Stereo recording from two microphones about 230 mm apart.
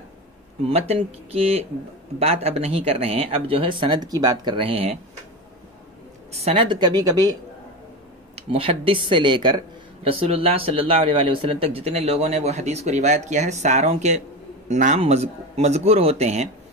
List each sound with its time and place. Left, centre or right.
0.7 s speech: right
6.3 s a woman's voice: right
8.4 s speech: right